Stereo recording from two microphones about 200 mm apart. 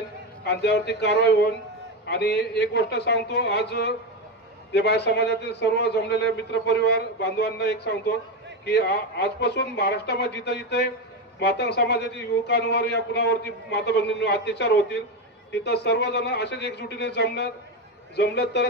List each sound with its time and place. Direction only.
0.4 s a man's voice: 60° left (ahead or behind)